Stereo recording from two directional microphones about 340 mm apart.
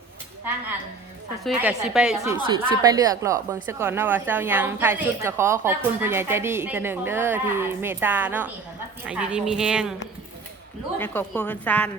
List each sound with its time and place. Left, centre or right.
1.5 s a woman's voice: centre
10.9 s speech: centre